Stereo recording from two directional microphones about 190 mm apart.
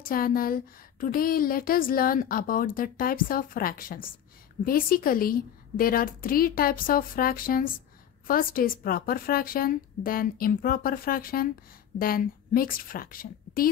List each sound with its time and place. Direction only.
0.0 s a woman's voice: 50° left (ahead or behind)